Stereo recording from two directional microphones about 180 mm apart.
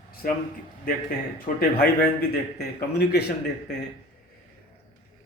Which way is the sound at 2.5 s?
60° left (ahead or behind).